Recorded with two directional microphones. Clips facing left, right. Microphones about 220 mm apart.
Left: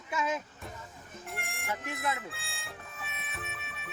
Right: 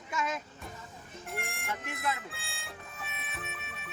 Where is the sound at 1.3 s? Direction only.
Centre (ahead or behind).